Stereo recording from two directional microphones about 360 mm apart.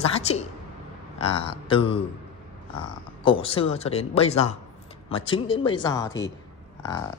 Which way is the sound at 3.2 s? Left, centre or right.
Centre.